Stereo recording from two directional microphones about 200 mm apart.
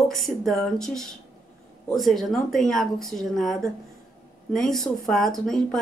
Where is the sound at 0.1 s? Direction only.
Centre (ahead or behind).